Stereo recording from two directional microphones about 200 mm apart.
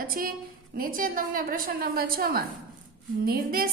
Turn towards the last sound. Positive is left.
turn(degrees=-45)  # may be behind; listen again after turning